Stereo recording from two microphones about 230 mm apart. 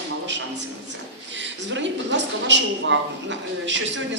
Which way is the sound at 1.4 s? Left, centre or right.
Right.